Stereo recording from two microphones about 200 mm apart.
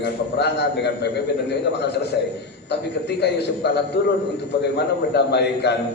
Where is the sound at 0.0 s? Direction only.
55° left (ahead or behind).